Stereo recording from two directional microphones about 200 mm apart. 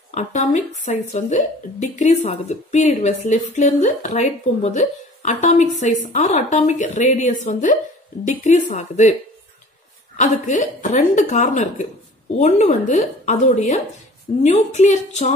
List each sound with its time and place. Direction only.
0.1 s speech: 35° left (ahead or behind)
10.1 s speech: 35° left (ahead or behind)